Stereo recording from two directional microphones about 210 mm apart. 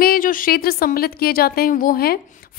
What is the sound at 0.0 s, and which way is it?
Speech, 40° left (ahead or behind).